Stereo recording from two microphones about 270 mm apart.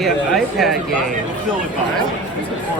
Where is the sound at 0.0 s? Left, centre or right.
Centre.